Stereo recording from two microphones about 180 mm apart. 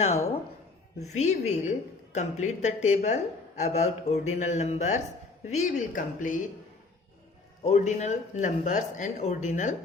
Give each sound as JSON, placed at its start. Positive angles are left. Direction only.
{"t": 1.0, "sound": "speech", "side_deg": 40}
{"t": 7.6, "sound": "speech", "side_deg": 40}